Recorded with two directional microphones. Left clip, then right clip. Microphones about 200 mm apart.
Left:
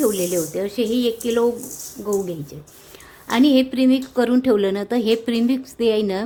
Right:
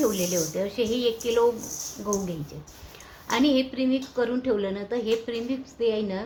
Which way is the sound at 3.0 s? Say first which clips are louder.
Left 6 dB; 50° left (ahead or behind).